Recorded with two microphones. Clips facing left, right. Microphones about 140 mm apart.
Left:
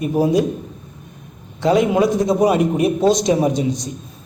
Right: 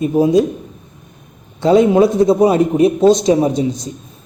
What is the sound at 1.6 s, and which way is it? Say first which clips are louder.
A man's voice: right 5 dB; 25° right (ahead or behind).